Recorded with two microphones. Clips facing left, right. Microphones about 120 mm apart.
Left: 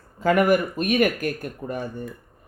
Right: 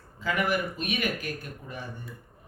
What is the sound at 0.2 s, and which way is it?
Speech, 50° left (ahead or behind).